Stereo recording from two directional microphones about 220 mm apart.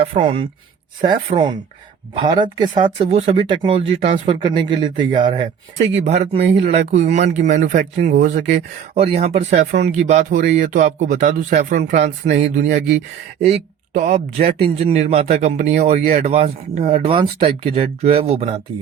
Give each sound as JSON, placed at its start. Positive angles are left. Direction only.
{"t": 0.0, "sound": "speech", "side_deg": -25}
{"t": 13.9, "sound": "speech", "side_deg": -35}